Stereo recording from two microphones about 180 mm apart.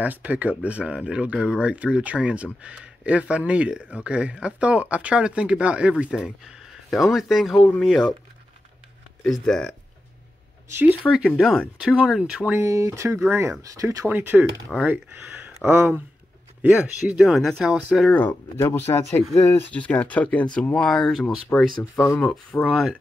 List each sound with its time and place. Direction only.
0.0 s speech: 10° right (ahead or behind)
9.2 s speech: 5° left (ahead or behind)
10.8 s speech: 5° right (ahead or behind); by 22.3 s 15° left (ahead or behind)
22.3 s speech: 5° left (ahead or behind)